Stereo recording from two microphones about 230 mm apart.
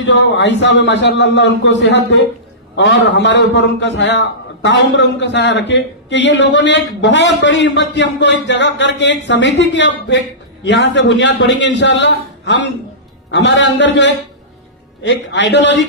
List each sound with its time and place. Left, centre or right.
0.0 s a man's voice: left